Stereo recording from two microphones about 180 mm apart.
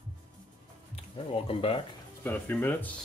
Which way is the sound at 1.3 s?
30° left (ahead or behind).